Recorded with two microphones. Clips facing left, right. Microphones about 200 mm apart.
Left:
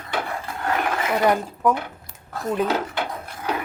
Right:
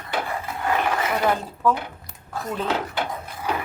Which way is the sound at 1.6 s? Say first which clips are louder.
Left 1 dB; 15° left (ahead or behind).